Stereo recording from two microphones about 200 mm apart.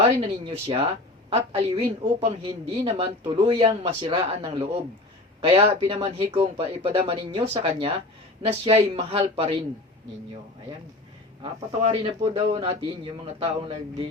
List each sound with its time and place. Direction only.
0.0 s speech: 25° right (ahead or behind)
11.4 s speech: 25° right (ahead or behind)